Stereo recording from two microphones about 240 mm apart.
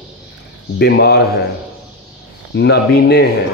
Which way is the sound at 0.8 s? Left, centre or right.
Left.